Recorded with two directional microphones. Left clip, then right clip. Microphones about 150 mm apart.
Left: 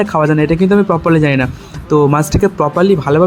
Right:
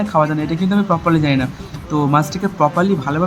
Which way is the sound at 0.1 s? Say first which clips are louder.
Left 4 dB; 40° left (ahead or behind).